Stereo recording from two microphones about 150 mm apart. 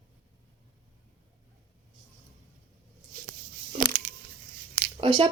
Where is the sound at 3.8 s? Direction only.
55° right (ahead or behind).